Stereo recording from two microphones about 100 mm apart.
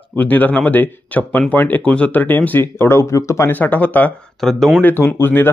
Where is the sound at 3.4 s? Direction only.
15° left (ahead or behind).